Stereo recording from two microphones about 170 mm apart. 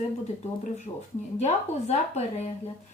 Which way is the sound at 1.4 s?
40° left (ahead or behind).